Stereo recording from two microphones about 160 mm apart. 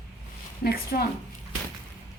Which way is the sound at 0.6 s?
75° left (ahead or behind).